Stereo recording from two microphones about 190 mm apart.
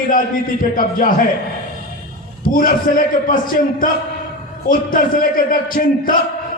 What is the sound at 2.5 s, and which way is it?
A man's voice, 45° left (ahead or behind).